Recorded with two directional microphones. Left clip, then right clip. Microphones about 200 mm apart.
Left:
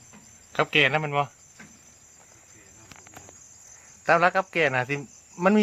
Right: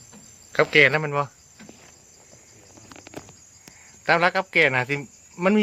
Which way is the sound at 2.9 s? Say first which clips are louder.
Right 5 dB; 10° left (ahead or behind).